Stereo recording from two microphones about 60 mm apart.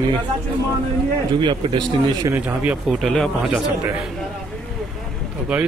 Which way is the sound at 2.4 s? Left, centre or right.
Right.